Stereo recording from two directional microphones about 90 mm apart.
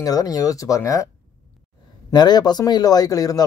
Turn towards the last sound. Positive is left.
turn(degrees=40)  # may be behind; listen again after turning